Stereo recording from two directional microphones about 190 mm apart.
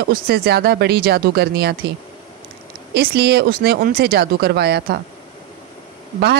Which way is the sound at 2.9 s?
60° right (ahead or behind).